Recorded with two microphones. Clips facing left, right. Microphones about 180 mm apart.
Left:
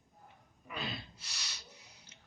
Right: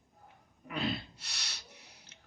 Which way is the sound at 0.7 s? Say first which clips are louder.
Right 7 dB; 70° right (ahead or behind).